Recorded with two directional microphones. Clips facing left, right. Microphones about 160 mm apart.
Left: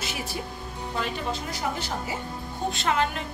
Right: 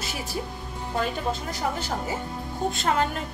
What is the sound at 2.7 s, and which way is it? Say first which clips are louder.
Speech: even; 40° right (ahead or behind).